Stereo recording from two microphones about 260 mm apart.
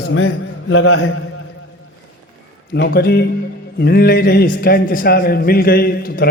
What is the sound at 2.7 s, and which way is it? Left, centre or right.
A man's voice, left.